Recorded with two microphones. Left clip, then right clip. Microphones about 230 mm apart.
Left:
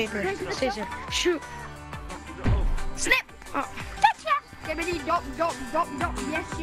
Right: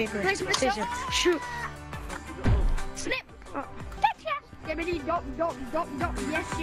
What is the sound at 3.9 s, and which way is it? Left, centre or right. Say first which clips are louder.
Music: left 5 dB; left.